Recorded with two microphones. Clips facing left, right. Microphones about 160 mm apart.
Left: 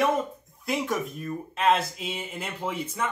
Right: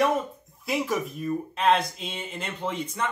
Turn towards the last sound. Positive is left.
turn(degrees=5)  # may be behind; listen again after turning